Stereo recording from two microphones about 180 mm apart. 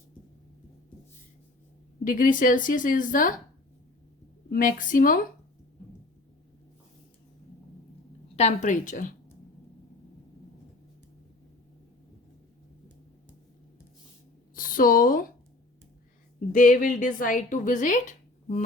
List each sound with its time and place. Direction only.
2.0 s a woman's voice: 50° left (ahead or behind)
4.4 s a woman's voice: 50° left (ahead or behind)
8.4 s a woman's voice: 40° left (ahead or behind)
14.5 s speech: 50° left (ahead or behind)
16.5 s a woman's voice: 45° left (ahead or behind)